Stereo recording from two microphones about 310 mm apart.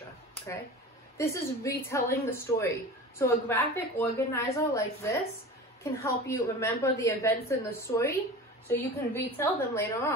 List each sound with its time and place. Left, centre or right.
1.1 s a woman's voice: centre